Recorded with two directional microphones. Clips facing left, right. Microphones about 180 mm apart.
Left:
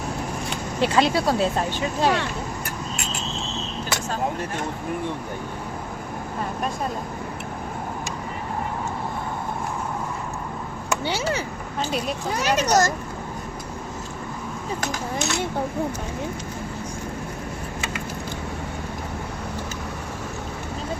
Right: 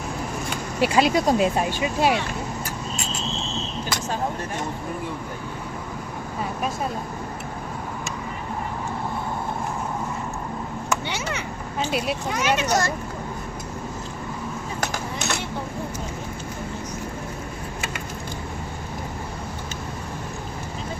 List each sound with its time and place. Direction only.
0.8 s speech: 10° right (ahead or behind)
11.0 s speech: 35° left (ahead or behind)
11.8 s speech: 5° right (ahead or behind)
12.3 s speech: 35° left (ahead or behind)